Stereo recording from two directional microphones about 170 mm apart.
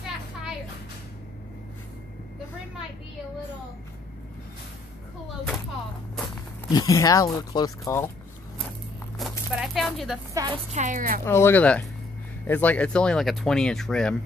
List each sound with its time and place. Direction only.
6.7 s speech: 20° left (ahead or behind)
9.2 s a sound: centre (ahead or behind)
9.6 s speech: centre (ahead or behind)
10.3 s a woman's voice: 25° right (ahead or behind)
10.7 s a woman's voice: 45° right (ahead or behind)
11.2 s speech: 15° left (ahead or behind)